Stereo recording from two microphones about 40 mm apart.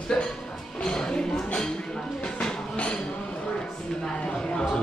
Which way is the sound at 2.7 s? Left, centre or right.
Left.